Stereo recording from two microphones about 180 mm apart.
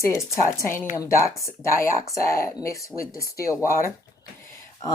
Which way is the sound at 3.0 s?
55° left (ahead or behind).